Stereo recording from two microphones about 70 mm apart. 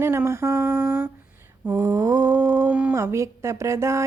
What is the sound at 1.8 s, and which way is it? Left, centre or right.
Humming, right.